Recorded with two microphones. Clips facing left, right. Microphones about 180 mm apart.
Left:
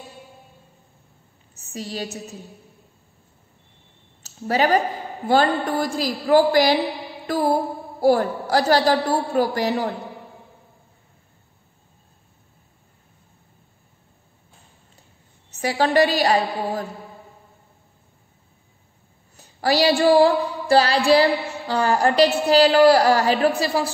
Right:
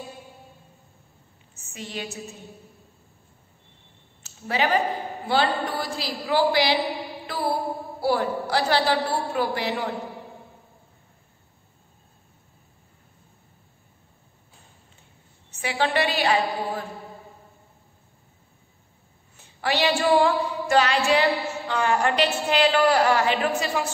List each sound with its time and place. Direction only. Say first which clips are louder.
1.5 s a woman's voice: left 5 dB; 35° left (ahead or behind)
4.2 s a woman's voice: left 5 dB; 40° left (ahead or behind)
15.5 s a woman's voice: left 5 dB; 40° left (ahead or behind)
19.3 s a woman's voice: left 5 dB; 40° left (ahead or behind)